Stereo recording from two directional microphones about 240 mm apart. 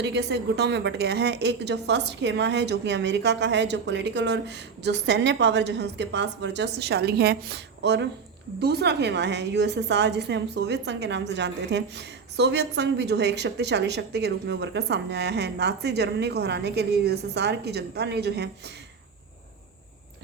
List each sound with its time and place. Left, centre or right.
0.0 s a woman's voice: right